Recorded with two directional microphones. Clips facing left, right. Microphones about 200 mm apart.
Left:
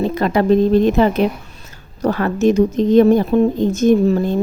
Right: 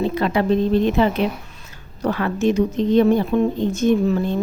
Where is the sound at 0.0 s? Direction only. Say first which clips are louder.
Left 3 dB; 45° left (ahead or behind).